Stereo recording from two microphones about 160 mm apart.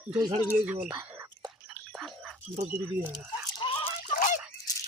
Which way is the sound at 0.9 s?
20° right (ahead or behind).